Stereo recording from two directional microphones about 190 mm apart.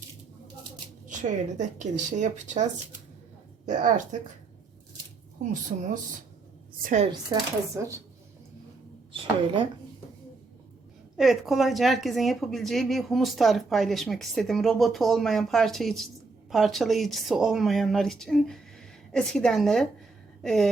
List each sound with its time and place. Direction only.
1.0 s a woman's voice: 40° right (ahead or behind)
3.7 s a woman's voice: 40° right (ahead or behind)
6.8 s a woman's voice: 40° right (ahead or behind)
7.8 s speech: 15° right (ahead or behind)
9.1 s a woman's voice: 25° right (ahead or behind)
11.2 s speech: centre (ahead or behind)
20.4 s a sound: centre (ahead or behind)